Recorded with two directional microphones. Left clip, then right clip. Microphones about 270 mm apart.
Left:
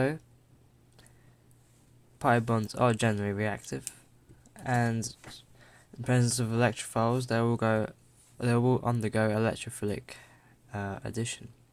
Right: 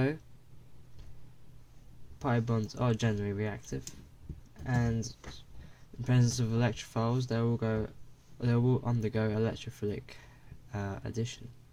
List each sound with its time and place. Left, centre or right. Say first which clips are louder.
2.1 s speech: left 7 dB; left